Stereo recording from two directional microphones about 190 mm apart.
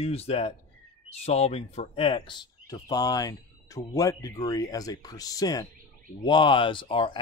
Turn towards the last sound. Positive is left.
turn(degrees=25)  # may be behind; listen again after turning